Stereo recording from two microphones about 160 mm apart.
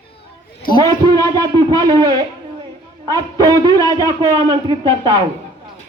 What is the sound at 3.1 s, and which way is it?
Speech, 25° right (ahead or behind).